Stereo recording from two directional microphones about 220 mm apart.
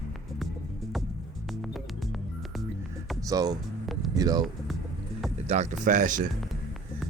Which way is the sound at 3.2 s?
15° right (ahead or behind).